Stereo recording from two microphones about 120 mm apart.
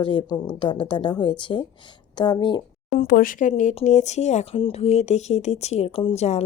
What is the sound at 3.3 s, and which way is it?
Speech, 90° left.